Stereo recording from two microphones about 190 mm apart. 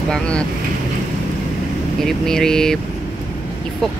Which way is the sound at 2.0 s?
Centre (ahead or behind).